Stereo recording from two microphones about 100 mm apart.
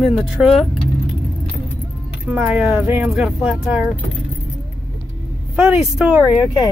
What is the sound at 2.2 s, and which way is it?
Speech, 15° right (ahead or behind).